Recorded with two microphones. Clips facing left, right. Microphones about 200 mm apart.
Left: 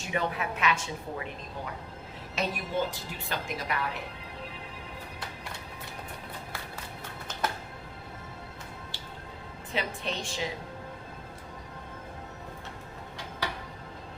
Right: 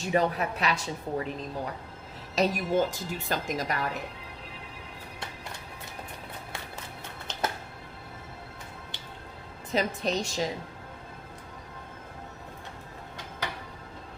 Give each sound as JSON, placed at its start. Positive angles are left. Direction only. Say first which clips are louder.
{"t": 0.0, "sound": "a woman's voice", "louder": "right 5 dB", "side_deg": -40}
{"t": 2.3, "sound": "a woman's voice", "louder": "right 6 dB", "side_deg": -45}
{"t": 9.7, "sound": "a woman's voice", "louder": "right 6 dB", "side_deg": -40}